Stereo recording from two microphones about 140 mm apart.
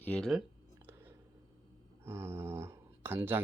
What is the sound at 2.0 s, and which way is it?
Speech, 20° right (ahead or behind).